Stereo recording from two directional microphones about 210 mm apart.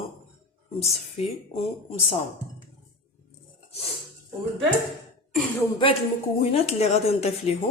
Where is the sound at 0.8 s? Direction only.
30° left (ahead or behind).